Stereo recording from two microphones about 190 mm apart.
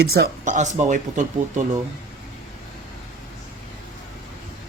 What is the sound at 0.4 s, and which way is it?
Speech, 40° right (ahead or behind).